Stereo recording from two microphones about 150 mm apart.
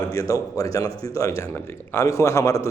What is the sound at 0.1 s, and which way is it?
A man's voice, 25° left (ahead or behind).